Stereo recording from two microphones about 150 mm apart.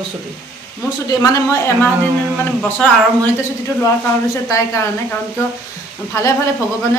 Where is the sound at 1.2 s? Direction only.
15° left (ahead or behind).